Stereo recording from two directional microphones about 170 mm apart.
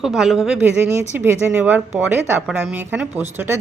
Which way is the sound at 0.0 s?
Centre (ahead or behind).